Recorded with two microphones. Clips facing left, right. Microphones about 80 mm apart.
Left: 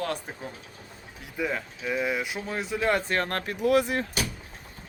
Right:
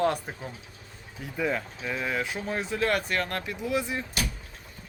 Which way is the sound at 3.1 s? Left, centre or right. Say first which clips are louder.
Left 2 dB; left.